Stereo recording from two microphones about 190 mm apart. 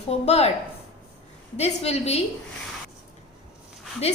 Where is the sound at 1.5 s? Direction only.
35° left (ahead or behind).